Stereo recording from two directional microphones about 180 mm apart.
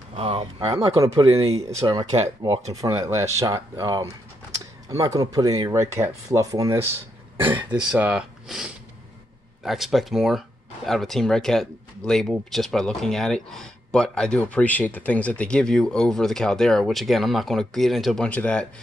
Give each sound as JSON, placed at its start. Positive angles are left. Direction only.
{"t": 0.1, "sound": "speech", "side_deg": -35}
{"t": 0.9, "sound": "speech", "side_deg": -20}